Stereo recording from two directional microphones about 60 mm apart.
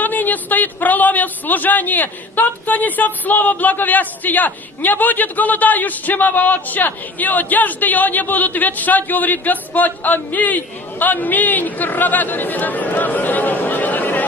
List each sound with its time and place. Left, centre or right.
0.0 s speech: left